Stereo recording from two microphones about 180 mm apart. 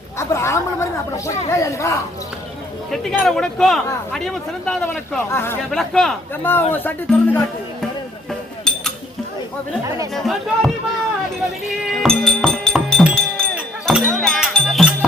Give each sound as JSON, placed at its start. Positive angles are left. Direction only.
{"t": 0.2, "sound": "speech", "side_deg": 15}
{"t": 2.9, "sound": "speech", "side_deg": 0}
{"t": 5.7, "sound": "speech", "side_deg": 5}
{"t": 8.3, "sound": "a sound", "side_deg": 5}
{"t": 10.2, "sound": "speech", "side_deg": 0}
{"t": 11.9, "sound": "music", "side_deg": 5}